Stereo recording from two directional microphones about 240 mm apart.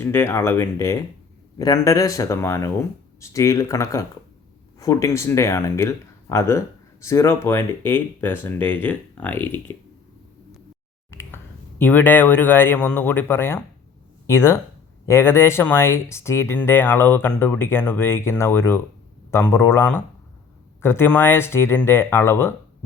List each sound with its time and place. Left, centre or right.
0.0 s speech: centre
11.1 s finger snapping: centre
11.8 s speech: centre